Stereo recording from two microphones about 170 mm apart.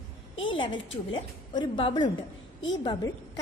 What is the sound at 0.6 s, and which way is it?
A woman's voice, 30° left (ahead or behind).